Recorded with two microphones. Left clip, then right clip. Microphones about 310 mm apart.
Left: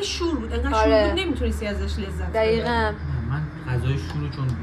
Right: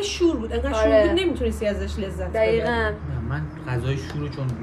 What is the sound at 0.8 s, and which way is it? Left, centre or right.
Speech, left.